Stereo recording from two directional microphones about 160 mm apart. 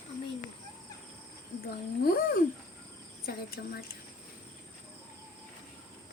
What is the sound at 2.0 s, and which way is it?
Speech, 70° left (ahead or behind).